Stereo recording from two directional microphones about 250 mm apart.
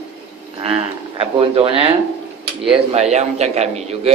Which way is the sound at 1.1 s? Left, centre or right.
Right.